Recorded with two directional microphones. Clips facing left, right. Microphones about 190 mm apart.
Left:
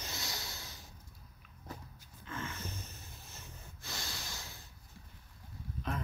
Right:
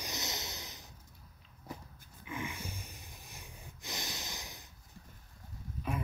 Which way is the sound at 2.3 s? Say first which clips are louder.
Right 2 dB; 15° right (ahead or behind).